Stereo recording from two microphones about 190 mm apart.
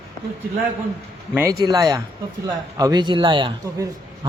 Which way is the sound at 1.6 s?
20° right (ahead or behind).